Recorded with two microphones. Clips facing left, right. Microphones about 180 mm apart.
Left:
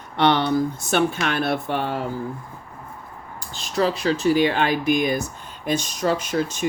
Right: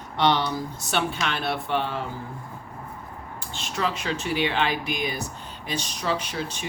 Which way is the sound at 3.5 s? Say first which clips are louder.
Left 6 dB; 35° left (ahead or behind).